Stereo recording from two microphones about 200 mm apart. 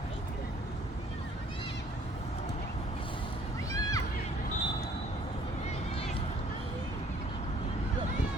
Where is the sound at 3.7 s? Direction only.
15° left (ahead or behind).